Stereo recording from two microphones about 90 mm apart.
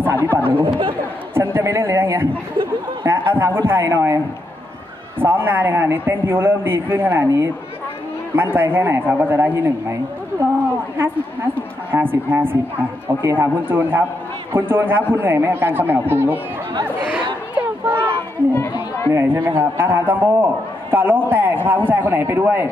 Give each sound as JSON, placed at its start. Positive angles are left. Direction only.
{"t": 0.0, "sound": "a man's voice", "side_deg": -25}
{"t": 0.7, "sound": "speech", "side_deg": -90}
{"t": 1.3, "sound": "a sound", "side_deg": -30}
{"t": 5.2, "sound": "a man's voice", "side_deg": -25}
{"t": 8.4, "sound": "a man's voice", "side_deg": -25}
{"t": 11.9, "sound": "a man's voice", "side_deg": -25}
{"t": 16.8, "sound": "chatter", "side_deg": -20}
{"t": 18.5, "sound": "run", "side_deg": 30}
{"t": 19.1, "sound": "a man's voice", "side_deg": -30}